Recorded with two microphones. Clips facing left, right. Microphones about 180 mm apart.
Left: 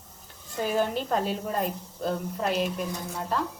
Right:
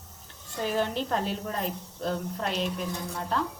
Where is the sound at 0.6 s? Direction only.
5° left (ahead or behind).